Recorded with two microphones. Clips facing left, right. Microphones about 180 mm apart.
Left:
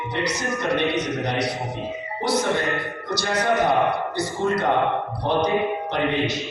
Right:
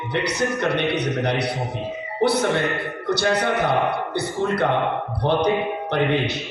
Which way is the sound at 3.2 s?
60° right (ahead or behind).